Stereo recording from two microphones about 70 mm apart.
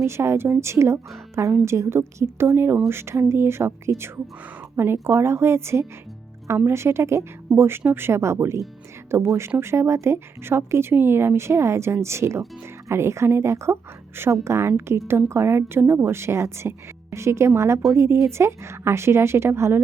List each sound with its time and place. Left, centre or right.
0.0 s a woman's voice: right